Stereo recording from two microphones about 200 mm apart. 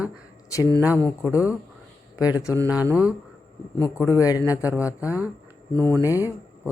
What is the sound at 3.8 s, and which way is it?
Speech, 15° left (ahead or behind).